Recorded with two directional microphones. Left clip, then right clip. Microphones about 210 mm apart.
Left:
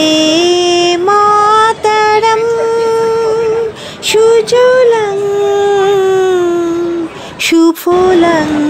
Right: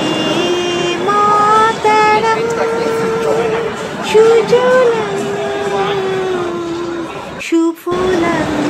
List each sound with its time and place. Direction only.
0.2 s mantra: 40° left (ahead or behind)
4.1 s female singing: 40° left (ahead or behind)